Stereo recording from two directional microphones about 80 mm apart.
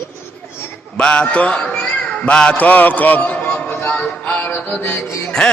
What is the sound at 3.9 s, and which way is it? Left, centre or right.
Music, centre.